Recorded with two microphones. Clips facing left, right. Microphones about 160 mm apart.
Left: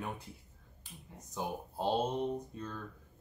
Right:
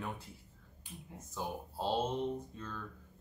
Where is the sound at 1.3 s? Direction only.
15° left (ahead or behind).